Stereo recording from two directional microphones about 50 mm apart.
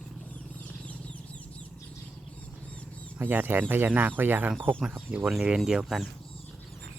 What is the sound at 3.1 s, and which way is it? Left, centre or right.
Speech, right.